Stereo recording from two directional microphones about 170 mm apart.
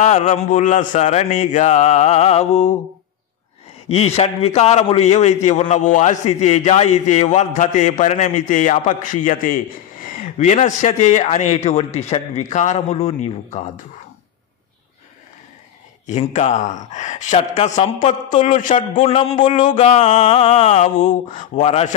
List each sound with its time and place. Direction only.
0.0 s a man's voice: 45° left (ahead or behind)
3.9 s a man's voice: 35° left (ahead or behind)
16.1 s a man's voice: 40° left (ahead or behind)
19.7 s a sound: 45° left (ahead or behind)